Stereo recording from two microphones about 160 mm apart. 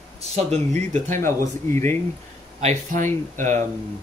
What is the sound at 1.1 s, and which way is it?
Speech, 15° left (ahead or behind).